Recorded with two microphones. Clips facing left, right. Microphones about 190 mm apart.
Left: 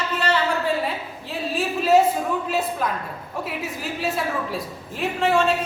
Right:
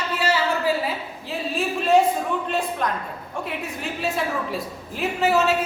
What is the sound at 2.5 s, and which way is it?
A woman's voice, 5° left (ahead or behind).